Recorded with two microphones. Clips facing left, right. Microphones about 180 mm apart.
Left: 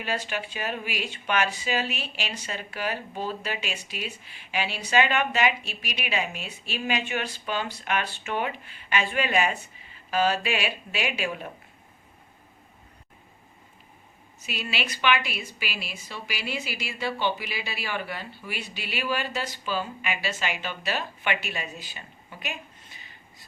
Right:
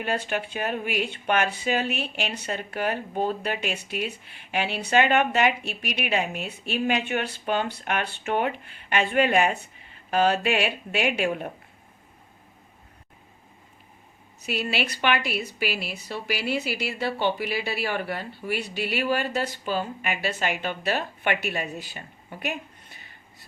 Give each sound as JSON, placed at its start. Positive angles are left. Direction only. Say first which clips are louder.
{"t": 0.0, "sound": "speech", "louder": "right 3 dB", "side_deg": -55}
{"t": 14.4, "sound": "speech", "louder": "right 5 dB", "side_deg": -55}